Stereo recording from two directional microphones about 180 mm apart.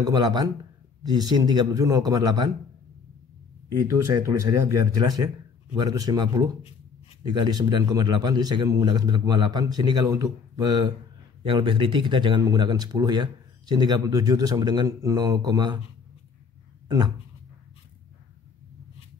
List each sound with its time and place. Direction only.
0.0 s speech: 20° right (ahead or behind)
3.8 s speech: 15° right (ahead or behind)
16.8 s speech: 25° right (ahead or behind)